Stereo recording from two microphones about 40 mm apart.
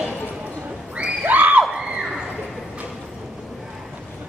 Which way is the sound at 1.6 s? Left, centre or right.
Centre.